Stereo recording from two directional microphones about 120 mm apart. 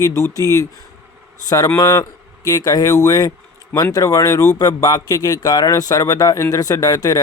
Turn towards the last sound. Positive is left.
turn(degrees=30)  # may be behind; listen again after turning